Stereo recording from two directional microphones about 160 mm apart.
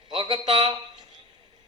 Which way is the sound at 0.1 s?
30° right (ahead or behind).